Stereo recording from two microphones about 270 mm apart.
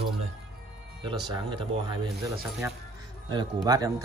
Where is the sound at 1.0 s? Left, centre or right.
Centre.